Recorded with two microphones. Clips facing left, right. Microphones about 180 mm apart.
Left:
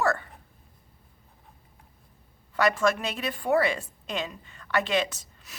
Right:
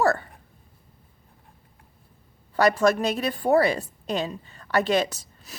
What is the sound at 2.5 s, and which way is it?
A woman's voice, 35° right (ahead or behind).